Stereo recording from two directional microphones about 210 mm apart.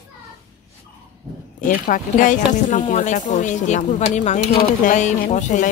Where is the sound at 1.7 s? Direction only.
40° left (ahead or behind).